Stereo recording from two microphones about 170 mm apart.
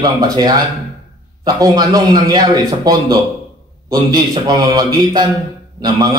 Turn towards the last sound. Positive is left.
turn(degrees=-20)  # may be behind; listen again after turning